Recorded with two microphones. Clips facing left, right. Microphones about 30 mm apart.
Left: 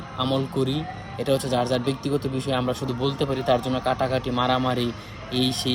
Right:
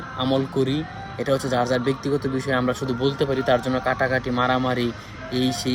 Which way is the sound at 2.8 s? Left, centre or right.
Right.